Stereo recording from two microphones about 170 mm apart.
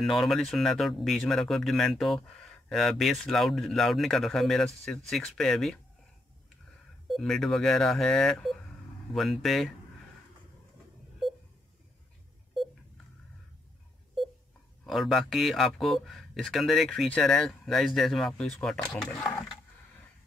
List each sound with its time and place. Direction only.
0.0 s speech: centre (ahead or behind)
7.1 s speech: centre (ahead or behind)
14.9 s speech: centre (ahead or behind)